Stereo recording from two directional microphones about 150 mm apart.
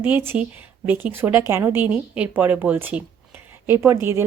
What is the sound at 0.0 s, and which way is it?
A woman's voice, 15° right (ahead or behind).